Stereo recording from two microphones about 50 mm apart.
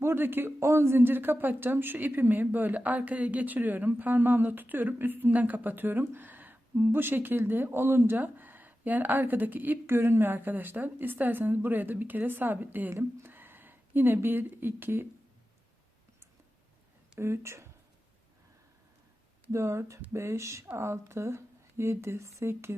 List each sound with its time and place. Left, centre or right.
0.0 s speech: right
0.6 s a woman's voice: right
17.2 s speech: right
19.5 s speech: right
20.7 s speech: right